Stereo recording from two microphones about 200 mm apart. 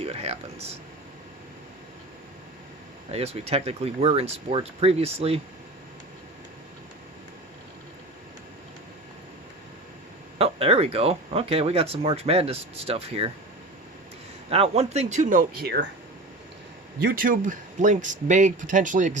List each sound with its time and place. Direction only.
0.0 s speech: 30° right (ahead or behind)
3.1 s speech: 30° right (ahead or behind)
10.3 s speech: 30° right (ahead or behind)
14.5 s speech: 30° right (ahead or behind); by 15.9 s 55° right (ahead or behind)
17.0 s speech: 50° right (ahead or behind)